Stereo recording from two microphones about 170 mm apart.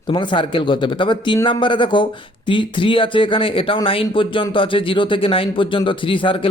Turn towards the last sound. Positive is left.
turn(degrees=30)  # may be behind; listen again after turning